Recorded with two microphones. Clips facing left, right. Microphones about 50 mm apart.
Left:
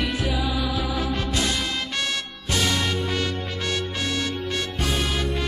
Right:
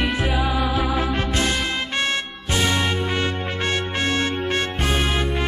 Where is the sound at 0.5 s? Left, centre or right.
Right.